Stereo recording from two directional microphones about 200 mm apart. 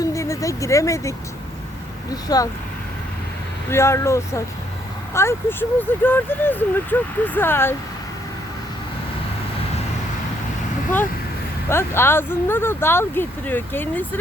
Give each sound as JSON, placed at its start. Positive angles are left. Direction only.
{"t": 0.0, "sound": "vehicle", "side_deg": 15}
{"t": 2.2, "sound": "speech", "side_deg": 20}
{"t": 3.7, "sound": "speech", "side_deg": 15}
{"t": 11.7, "sound": "speech", "side_deg": 10}